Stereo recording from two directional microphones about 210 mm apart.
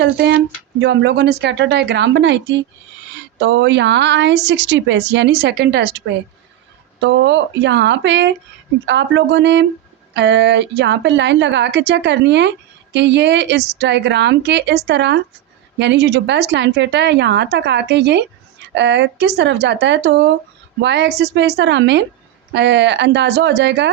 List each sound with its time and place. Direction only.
0.0 s a woman's voice: 55° right (ahead or behind)
7.0 s a woman's voice: 55° right (ahead or behind)